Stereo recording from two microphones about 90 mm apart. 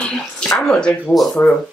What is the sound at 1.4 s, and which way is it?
Speech, 25° left (ahead or behind).